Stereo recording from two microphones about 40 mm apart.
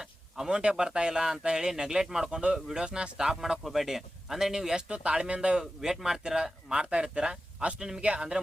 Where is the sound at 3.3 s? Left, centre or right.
Centre.